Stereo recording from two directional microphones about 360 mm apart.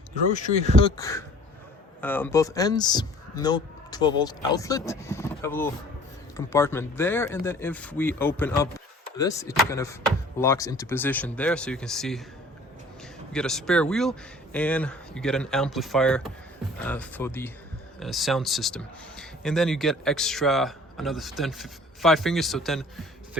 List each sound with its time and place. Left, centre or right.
0.3 s speech: centre
0.9 s speech: centre
13.3 s speech: centre